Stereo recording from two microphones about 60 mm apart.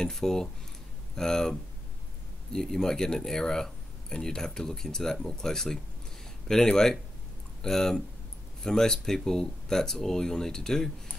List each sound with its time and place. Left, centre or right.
0.0 s speech: centre